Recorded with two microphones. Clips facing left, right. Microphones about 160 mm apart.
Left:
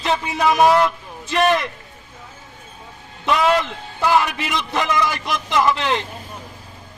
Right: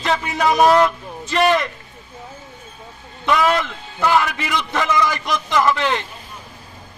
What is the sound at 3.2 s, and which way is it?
A man's voice, 20° left (ahead or behind).